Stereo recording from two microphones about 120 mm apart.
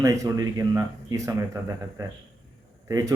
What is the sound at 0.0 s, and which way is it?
Speech, 25° right (ahead or behind).